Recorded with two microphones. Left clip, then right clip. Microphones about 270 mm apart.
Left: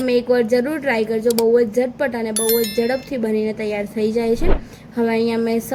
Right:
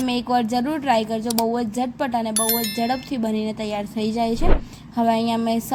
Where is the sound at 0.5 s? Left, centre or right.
Right.